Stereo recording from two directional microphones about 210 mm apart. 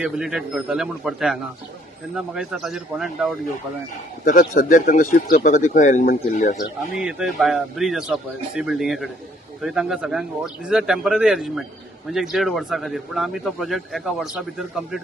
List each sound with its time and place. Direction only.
0.0 s speech: centre (ahead or behind)
4.2 s speech: 40° left (ahead or behind)
7.0 s speech: 5° right (ahead or behind)